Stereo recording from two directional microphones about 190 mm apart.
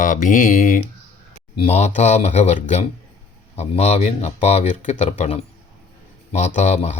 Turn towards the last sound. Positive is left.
turn(degrees=35)  # may be behind; listen again after turning